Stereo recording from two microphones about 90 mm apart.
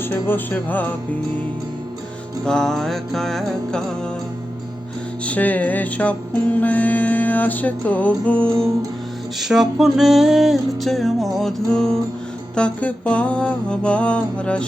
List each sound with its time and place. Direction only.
0.0 s music: 25° left (ahead or behind)
2.4 s music: 5° left (ahead or behind)
5.2 s music: 15° left (ahead or behind)
9.4 s music: 5° right (ahead or behind)